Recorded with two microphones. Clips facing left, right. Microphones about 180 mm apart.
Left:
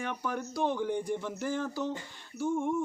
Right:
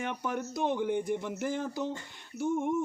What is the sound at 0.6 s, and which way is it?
A man's voice, 15° right (ahead or behind).